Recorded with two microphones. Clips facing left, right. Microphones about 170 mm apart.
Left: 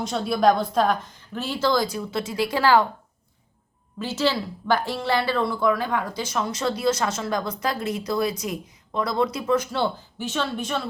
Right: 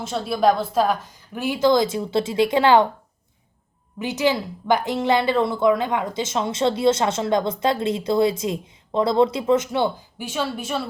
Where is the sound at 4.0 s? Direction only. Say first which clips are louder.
Right 3 dB; 20° right (ahead or behind).